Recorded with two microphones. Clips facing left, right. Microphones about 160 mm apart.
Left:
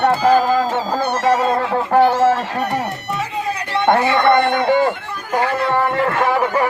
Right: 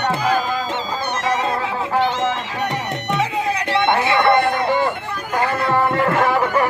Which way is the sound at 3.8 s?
40° left (ahead or behind).